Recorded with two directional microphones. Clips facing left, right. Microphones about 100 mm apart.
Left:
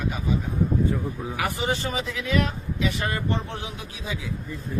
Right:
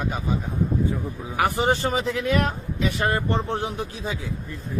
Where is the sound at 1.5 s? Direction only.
45° right (ahead or behind).